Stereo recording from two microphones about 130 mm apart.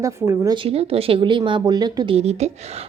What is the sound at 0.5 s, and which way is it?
A woman's voice, 45° right (ahead or behind).